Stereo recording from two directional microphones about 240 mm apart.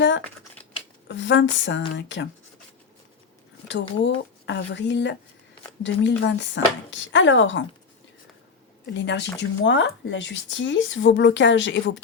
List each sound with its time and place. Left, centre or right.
1.0 s speech: left
3.7 s speech: left
8.9 s speech: left